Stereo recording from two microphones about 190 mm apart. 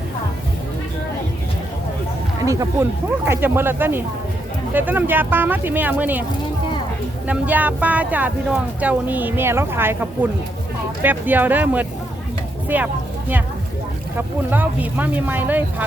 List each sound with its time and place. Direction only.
2.4 s speech: 15° right (ahead or behind)
7.3 s speech: 10° right (ahead or behind)
12.6 s a sound: 10° right (ahead or behind)
14.2 s speech: 10° right (ahead or behind)